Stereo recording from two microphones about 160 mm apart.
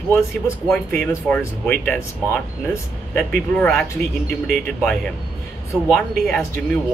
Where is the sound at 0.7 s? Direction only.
5° left (ahead or behind).